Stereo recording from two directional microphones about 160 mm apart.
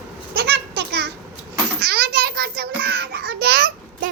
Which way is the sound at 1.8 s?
75° right (ahead or behind).